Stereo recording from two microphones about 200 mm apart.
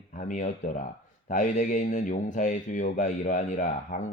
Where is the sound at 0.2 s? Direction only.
40° left (ahead or behind).